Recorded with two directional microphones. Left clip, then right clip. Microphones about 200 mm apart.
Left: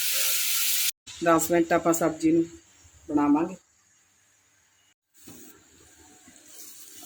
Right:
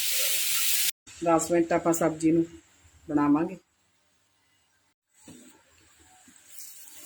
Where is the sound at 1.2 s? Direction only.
10° left (ahead or behind); by 2.3 s 5° right (ahead or behind).